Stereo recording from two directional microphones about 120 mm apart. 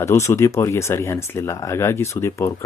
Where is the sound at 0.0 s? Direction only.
25° left (ahead or behind).